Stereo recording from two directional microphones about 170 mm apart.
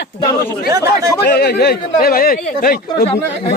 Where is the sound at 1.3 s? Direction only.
70° left (ahead or behind).